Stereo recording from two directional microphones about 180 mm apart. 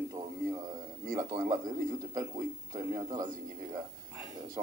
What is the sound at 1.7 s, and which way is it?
A man's voice, 20° right (ahead or behind).